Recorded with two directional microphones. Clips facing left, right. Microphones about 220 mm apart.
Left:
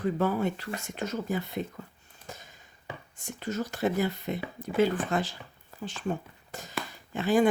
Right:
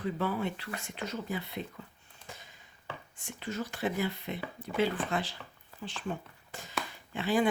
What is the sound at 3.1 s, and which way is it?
Speech, 40° left (ahead or behind).